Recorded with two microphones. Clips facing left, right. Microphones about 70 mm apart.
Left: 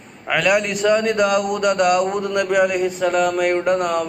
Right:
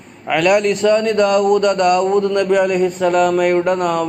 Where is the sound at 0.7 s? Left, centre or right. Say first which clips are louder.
Right 3 dB; centre.